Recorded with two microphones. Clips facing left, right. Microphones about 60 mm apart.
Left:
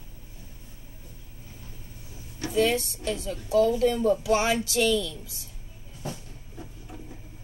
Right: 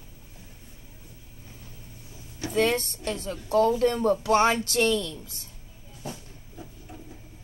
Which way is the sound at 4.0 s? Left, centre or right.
Right.